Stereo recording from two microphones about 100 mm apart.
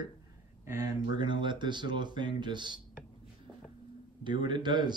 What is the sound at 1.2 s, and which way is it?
Speech, 50° right (ahead or behind).